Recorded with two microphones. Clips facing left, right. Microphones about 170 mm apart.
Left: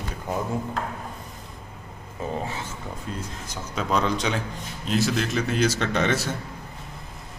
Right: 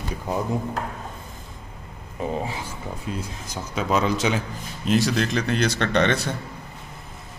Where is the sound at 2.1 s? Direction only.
15° right (ahead or behind).